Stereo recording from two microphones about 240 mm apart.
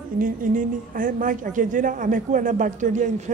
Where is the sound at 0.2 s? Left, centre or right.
Right.